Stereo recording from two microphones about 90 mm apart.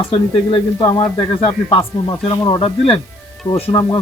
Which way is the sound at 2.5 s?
75° left (ahead or behind).